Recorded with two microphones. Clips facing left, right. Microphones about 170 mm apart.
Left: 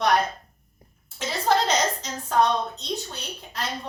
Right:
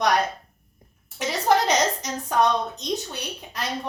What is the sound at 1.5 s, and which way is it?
A woman's voice, 15° right (ahead or behind).